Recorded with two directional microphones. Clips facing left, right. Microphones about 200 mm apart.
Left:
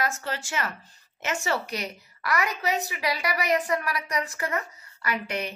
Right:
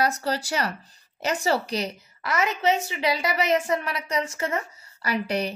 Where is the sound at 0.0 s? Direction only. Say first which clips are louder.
Right 5 dB; 35° right (ahead or behind).